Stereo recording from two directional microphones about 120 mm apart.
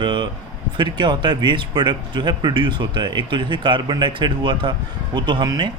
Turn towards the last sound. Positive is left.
turn(degrees=-40)  # may be behind; listen again after turning